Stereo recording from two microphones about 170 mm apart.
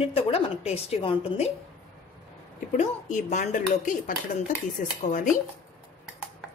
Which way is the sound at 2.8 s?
45° left (ahead or behind).